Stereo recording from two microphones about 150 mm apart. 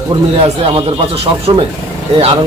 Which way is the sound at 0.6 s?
40° right (ahead or behind).